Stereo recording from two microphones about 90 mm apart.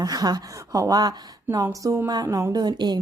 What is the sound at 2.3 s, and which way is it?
Speech, 30° right (ahead or behind).